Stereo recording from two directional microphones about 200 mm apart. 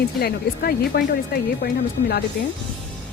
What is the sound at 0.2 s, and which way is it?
Speech, 50° left (ahead or behind).